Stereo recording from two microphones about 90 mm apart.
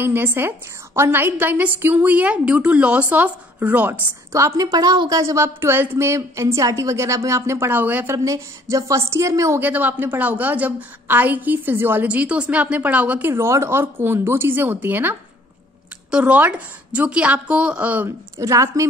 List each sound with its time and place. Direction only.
0.0 s a woman's voice: 25° right (ahead or behind)
4.3 s a woman's voice: 35° right (ahead or behind); by 5.1 s 50° right (ahead or behind)
5.1 s a woman's voice: 35° right (ahead or behind)
7.7 s a woman's voice: 20° right (ahead or behind)
8.1 s a woman's voice: 35° right (ahead or behind)
9.6 s a woman's voice: 20° right (ahead or behind)
13.3 s a woman's voice: 30° right (ahead or behind); by 18.0 s 15° right (ahead or behind)
18.0 s a woman's voice: 35° right (ahead or behind)